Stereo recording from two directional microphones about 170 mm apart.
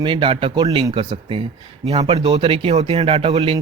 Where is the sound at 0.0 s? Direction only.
30° right (ahead or behind).